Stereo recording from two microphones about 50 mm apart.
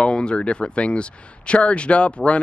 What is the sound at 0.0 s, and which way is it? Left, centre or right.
Speech, centre.